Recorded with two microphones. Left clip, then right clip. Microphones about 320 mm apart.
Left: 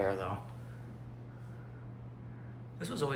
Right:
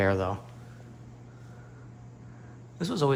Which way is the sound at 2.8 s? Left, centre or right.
Centre.